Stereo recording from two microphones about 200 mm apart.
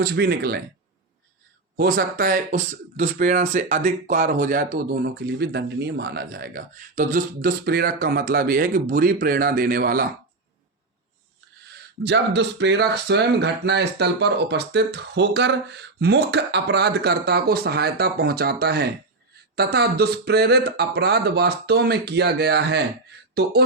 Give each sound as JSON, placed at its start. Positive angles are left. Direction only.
{"t": 0.0, "sound": "speech", "side_deg": -55}
{"t": 1.7, "sound": "speech", "side_deg": -50}
{"t": 12.0, "sound": "speech", "side_deg": -60}